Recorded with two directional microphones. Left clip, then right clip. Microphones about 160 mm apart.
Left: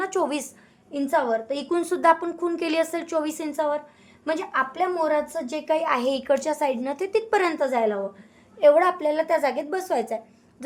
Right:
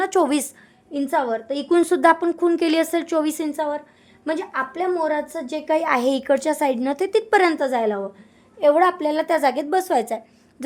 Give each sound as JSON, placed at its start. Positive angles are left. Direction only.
{"t": 0.0, "sound": "a woman's voice", "side_deg": -50}
{"t": 0.9, "sound": "speech", "side_deg": -35}
{"t": 8.5, "sound": "a woman's voice", "side_deg": -30}